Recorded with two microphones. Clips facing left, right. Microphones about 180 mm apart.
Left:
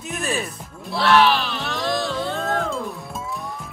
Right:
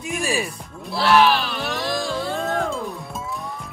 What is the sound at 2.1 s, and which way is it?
Music, 5° right (ahead or behind).